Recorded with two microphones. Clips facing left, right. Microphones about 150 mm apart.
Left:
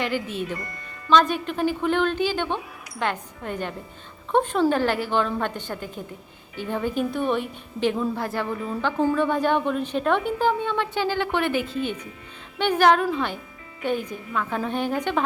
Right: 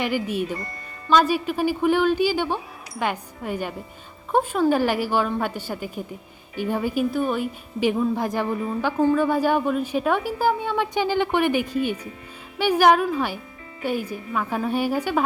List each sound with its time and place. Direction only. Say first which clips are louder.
0.0 s a woman's voice: right 2 dB; 10° right (ahead or behind)
0.5 s music: right 1 dB; 25° right (ahead or behind)
1.1 s a woman's voice: right 1 dB; 10° right (ahead or behind)